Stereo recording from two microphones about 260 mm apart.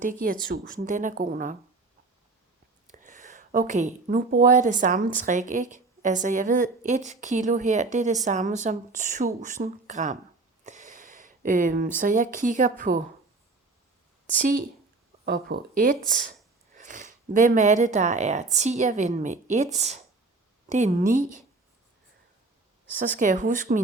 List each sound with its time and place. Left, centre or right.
0.0 s a woman's voice: right
2.8 s a woman's voice: right
14.3 s a woman's voice: right
23.0 s a woman's voice: right